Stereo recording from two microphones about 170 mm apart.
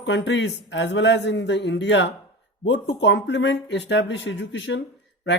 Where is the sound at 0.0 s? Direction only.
90° left.